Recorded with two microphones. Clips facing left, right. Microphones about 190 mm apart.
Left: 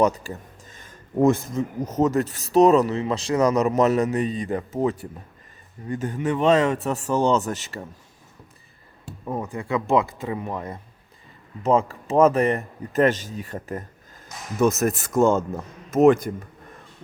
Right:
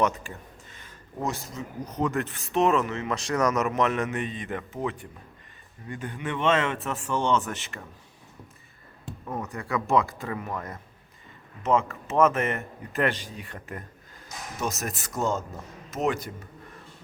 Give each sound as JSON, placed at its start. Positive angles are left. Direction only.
{"t": 0.0, "sound": "a sound", "side_deg": 35}
{"t": 1.2, "sound": "speech", "side_deg": 50}
{"t": 9.2, "sound": "speech", "side_deg": 15}
{"t": 14.6, "sound": "speech", "side_deg": 50}